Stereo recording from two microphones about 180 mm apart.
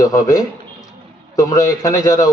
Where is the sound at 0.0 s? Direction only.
20° left (ahead or behind).